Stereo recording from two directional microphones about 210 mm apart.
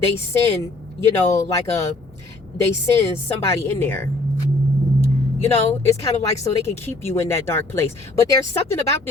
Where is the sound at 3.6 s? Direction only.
10° left (ahead or behind).